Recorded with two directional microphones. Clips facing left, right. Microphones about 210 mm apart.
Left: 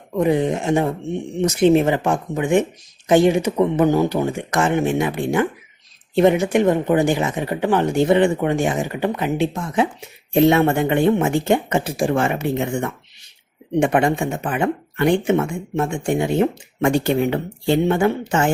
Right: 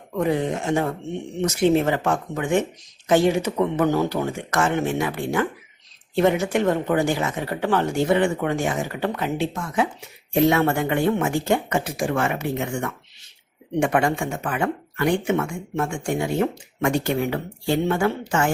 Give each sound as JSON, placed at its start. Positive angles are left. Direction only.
{"t": 0.1, "sound": "speech", "side_deg": 20}